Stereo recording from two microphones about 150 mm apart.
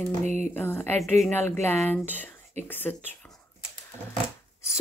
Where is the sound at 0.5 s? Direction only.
15° left (ahead or behind).